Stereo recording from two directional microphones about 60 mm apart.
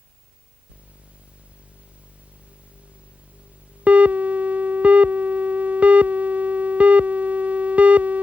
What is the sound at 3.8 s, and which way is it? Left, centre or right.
Busy signal, right.